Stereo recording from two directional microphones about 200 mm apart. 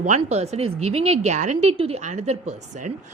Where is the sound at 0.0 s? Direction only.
35° right (ahead or behind).